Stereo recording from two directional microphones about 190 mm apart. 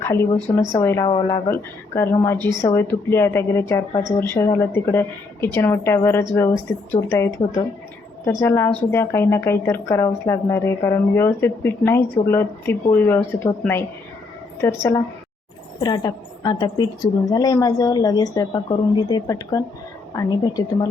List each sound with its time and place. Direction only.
0.0 s a woman's voice: 15° left (ahead or behind)
1.0 s a woman's voice: 25° left (ahead or behind)
2.0 s a woman's voice: 15° left (ahead or behind)